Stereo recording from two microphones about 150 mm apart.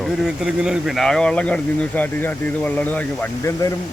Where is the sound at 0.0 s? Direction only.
Centre (ahead or behind).